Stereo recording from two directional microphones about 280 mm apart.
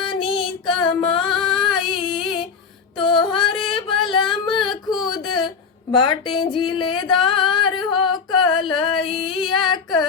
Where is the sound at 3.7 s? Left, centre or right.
Centre.